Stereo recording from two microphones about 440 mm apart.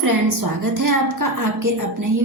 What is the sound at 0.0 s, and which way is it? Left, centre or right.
A woman's voice, right.